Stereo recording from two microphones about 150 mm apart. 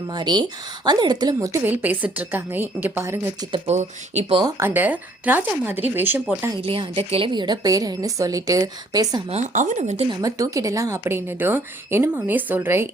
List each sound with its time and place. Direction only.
0.1 s a woman's voice: 30° right (ahead or behind)
1.6 s a woman's voice: 10° right (ahead or behind)
3.7 s speech: 50° right (ahead or behind)
4.4 s a woman's voice: 15° right (ahead or behind)
6.6 s a woman's voice: 35° right (ahead or behind)
9.3 s speech: 55° right (ahead or behind)
10.1 s a woman's voice: 25° right (ahead or behind)